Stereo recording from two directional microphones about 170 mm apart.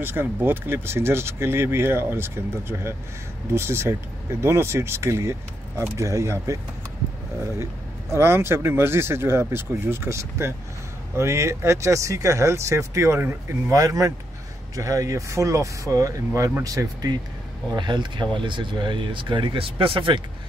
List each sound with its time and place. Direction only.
0.0 s speech: 10° right (ahead or behind)
8.1 s speech: 15° right (ahead or behind); by 20.2 s 30° right (ahead or behind)